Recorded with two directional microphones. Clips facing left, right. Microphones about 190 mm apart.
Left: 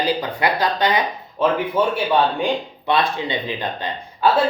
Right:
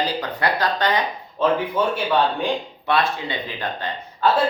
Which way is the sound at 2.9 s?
20° left (ahead or behind).